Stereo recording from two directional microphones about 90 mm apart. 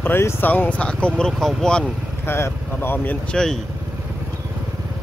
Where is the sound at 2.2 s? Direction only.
25° left (ahead or behind).